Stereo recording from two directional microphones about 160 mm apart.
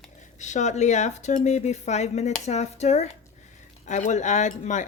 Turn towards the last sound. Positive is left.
turn(degrees=50)  # may be behind; listen again after turning